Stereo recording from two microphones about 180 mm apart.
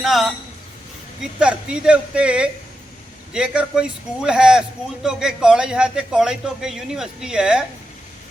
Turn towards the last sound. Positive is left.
turn(degrees=-5)  # may be behind; listen again after turning